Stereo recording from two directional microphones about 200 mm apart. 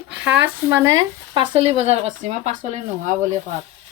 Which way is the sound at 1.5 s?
30° right (ahead or behind).